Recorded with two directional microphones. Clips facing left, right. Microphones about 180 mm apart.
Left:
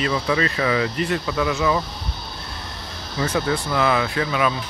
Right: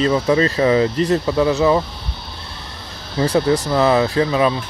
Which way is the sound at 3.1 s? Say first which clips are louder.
Right 6 dB; 35° right (ahead or behind).